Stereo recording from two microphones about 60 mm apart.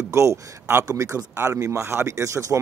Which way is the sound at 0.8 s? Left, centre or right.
Right.